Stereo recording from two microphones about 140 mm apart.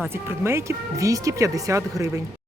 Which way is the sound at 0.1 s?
15° right (ahead or behind).